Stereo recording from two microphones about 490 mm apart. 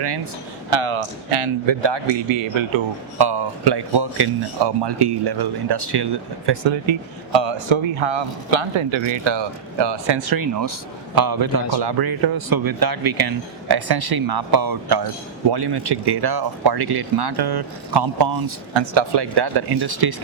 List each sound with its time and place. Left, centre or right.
0.7 s speech: right
10.2 s speech: right